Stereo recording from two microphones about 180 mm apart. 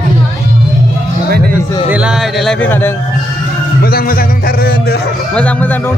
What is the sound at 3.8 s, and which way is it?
Music, 55° left (ahead or behind).